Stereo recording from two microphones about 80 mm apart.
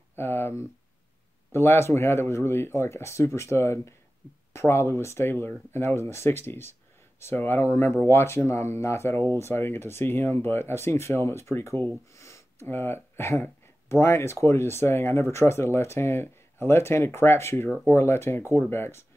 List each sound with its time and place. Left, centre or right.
0.2 s speech: left
12.2 s a sound: left
12.6 s speech: left